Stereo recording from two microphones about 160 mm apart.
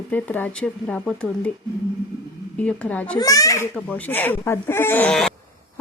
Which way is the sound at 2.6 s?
10° left (ahead or behind).